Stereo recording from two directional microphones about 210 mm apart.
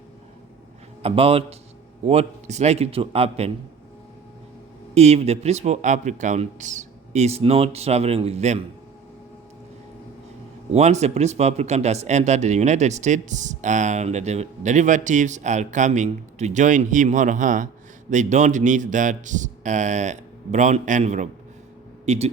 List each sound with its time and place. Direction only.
1.0 s speech: 25° right (ahead or behind)
4.9 s speech: 30° right (ahead or behind)
10.7 s speech: 30° right (ahead or behind)